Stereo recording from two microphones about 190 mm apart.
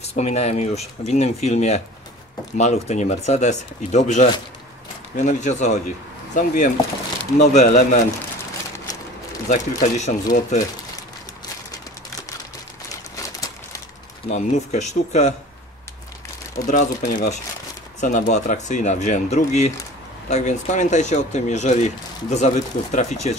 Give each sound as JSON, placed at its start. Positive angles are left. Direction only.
{"t": 0.1, "sound": "speech", "side_deg": 35}
{"t": 9.5, "sound": "speech", "side_deg": 40}
{"t": 13.1, "sound": "a sound", "side_deg": 20}
{"t": 14.3, "sound": "speech", "side_deg": 40}
{"t": 16.5, "sound": "speech", "side_deg": 45}